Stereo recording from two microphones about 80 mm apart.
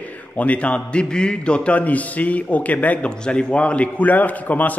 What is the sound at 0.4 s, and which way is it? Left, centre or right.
A man's voice, centre.